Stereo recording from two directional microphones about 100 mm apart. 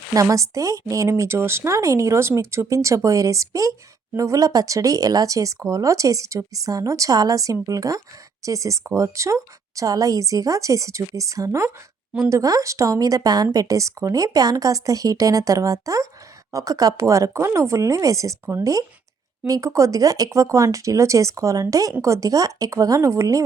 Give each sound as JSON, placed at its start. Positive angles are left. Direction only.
{"t": 0.1, "sound": "speech", "side_deg": -30}